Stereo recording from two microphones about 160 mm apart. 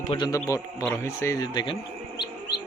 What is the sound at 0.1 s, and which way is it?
A man's voice, 25° left (ahead or behind).